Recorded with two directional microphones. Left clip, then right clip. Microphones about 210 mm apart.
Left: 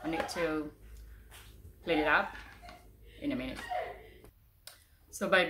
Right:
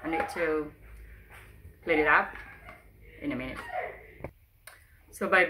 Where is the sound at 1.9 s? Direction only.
Centre (ahead or behind).